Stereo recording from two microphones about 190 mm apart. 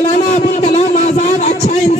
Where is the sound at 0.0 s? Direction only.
35° left (ahead or behind).